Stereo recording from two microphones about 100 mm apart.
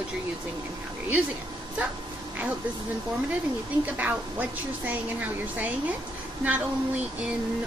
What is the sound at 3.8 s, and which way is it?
A woman's voice, 15° right (ahead or behind).